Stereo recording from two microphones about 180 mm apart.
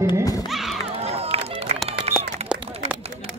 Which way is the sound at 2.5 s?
30° right (ahead or behind).